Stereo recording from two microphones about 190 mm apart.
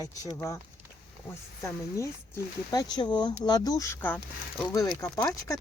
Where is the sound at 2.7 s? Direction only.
20° left (ahead or behind).